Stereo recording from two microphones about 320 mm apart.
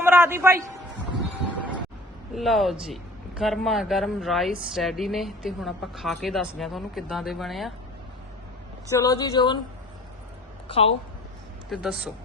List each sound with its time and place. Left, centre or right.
0.0 s a man's voice: centre
1.5 s a sound: centre
2.3 s speech: centre
8.9 s a woman's voice: centre
10.7 s a woman's voice: centre
11.7 s speech: centre